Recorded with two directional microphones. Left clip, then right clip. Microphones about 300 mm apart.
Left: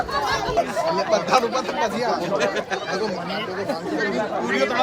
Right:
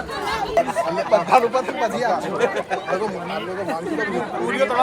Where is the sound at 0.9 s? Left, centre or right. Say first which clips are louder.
Right 4 dB; right.